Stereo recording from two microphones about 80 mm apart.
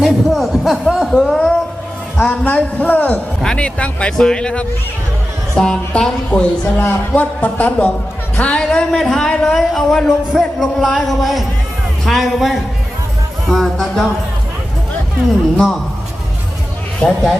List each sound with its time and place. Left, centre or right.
0.0 s speech: centre
2.1 s speech: centre
17.0 s speech: centre